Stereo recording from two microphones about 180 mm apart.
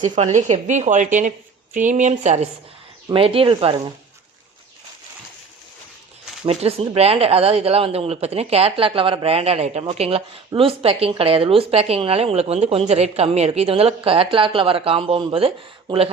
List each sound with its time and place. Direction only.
0.0 s speech: 40° right (ahead or behind)
6.4 s speech: 35° right (ahead or behind)